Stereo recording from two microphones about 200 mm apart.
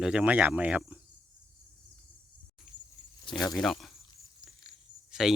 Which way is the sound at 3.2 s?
20° left (ahead or behind).